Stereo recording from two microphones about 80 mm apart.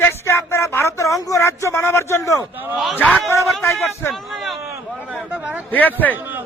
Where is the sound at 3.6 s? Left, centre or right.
Left.